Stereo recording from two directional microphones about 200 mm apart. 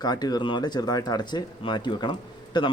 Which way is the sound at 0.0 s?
20° left (ahead or behind).